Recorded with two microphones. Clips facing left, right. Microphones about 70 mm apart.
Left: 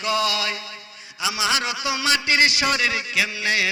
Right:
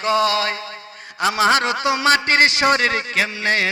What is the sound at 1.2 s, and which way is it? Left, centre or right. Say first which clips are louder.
A man's voice: right 7 dB; right.